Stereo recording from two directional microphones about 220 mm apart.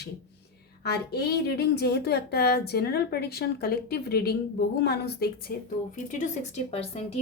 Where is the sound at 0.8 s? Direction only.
45° left (ahead or behind).